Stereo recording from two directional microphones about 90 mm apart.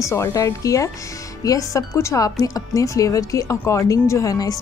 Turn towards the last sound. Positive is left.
turn(degrees=40)  # may be behind; listen again after turning